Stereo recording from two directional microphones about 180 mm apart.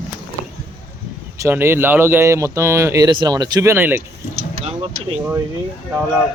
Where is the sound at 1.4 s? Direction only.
15° right (ahead or behind).